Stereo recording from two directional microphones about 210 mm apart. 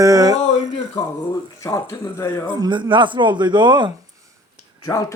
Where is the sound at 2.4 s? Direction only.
20° right (ahead or behind).